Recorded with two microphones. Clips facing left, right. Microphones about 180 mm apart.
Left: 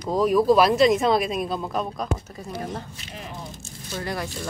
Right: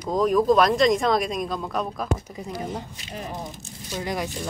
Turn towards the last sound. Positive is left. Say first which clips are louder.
# right 1 dB
turn(degrees=-15)  # may be behind; listen again after turning